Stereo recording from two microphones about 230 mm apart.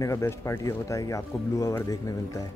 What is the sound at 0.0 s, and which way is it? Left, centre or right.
Speech, centre.